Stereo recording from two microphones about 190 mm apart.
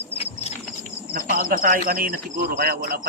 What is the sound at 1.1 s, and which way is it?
Speech, 50° right (ahead or behind).